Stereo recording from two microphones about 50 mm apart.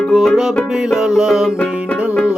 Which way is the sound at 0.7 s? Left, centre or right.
Centre.